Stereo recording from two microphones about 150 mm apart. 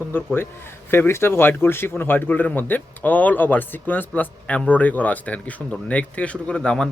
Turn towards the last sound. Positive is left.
turn(degrees=5)  # may be behind; listen again after turning